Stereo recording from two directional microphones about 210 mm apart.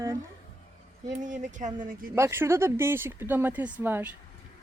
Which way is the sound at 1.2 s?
35° right (ahead or behind).